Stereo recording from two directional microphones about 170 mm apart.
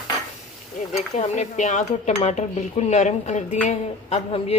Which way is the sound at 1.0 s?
40° left (ahead or behind).